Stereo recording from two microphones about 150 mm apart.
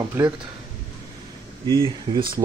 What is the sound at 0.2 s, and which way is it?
Speech, 20° right (ahead or behind).